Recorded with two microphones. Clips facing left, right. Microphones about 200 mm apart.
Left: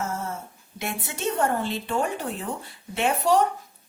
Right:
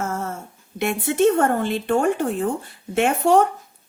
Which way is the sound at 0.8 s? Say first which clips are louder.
Right 13 dB; 55° right (ahead or behind).